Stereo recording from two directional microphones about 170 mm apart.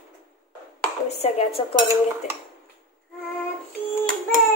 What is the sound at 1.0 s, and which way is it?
Dishes, 40° left (ahead or behind).